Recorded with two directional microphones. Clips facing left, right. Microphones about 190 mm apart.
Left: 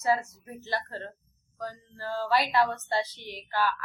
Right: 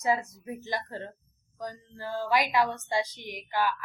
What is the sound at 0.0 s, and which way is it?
A woman's voice, 15° right (ahead or behind).